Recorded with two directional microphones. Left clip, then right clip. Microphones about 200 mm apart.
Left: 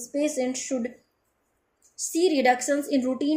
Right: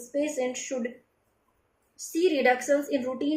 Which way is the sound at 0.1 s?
50° left (ahead or behind).